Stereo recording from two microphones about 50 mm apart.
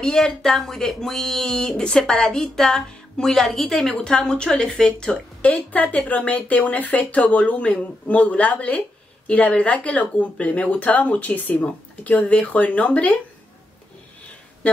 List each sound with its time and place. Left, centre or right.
0.0 s speech: centre
3.9 s speech: centre
5.4 s speech: left